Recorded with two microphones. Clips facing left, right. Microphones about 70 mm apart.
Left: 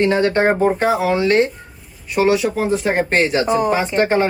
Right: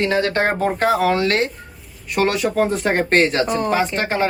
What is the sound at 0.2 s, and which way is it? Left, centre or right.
Speech, centre.